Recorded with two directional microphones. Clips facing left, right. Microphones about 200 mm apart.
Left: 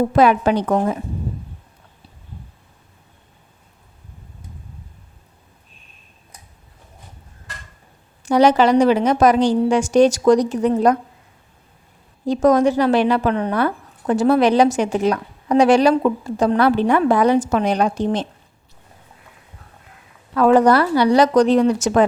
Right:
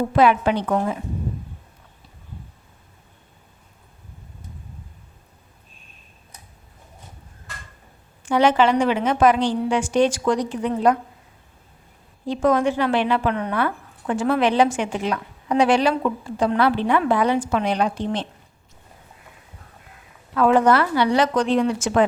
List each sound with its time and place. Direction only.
0.2 s speech: 40° left (ahead or behind)
8.2 s speech: 40° left (ahead or behind)
12.2 s speech: 40° left (ahead or behind)
20.3 s speech: 40° left (ahead or behind)